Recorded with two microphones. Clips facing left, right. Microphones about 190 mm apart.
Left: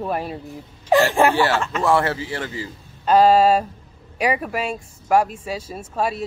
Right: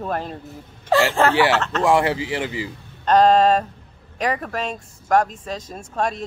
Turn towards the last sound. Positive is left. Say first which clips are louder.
# left 1 dB
turn(degrees=5)  # may be behind; listen again after turning